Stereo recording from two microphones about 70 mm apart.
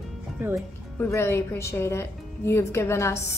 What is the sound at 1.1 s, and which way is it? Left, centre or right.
A woman's voice, left.